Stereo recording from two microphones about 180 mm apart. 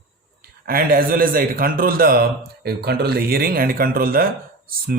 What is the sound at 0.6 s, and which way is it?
A man's voice, 55° right (ahead or behind).